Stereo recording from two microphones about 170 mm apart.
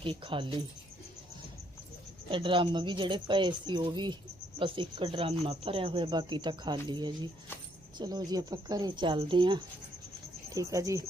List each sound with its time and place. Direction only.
0.0 s speech: 30° right (ahead or behind)
2.3 s speech: 30° right (ahead or behind)